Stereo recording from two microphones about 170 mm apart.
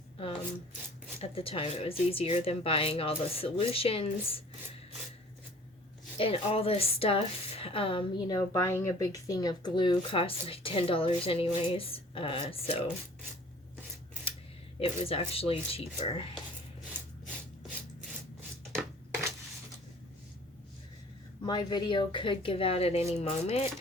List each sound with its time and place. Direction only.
1.2 s a woman's voice: 35° left (ahead or behind)
6.1 s a woman's voice: 35° left (ahead or behind)
14.8 s a woman's voice: 35° left (ahead or behind)
16.9 s a sound: 10° right (ahead or behind)
21.4 s a woman's voice: 25° left (ahead or behind)